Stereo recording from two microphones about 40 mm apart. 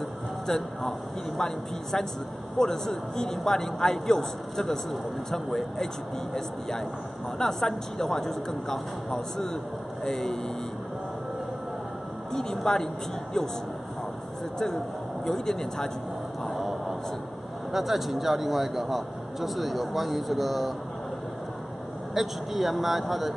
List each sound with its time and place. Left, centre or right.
0.5 s speech: centre
12.3 s a woman's voice: centre
15.2 s speech: centre
16.4 s a sound: centre
17.7 s speech: centre
22.1 s speech: centre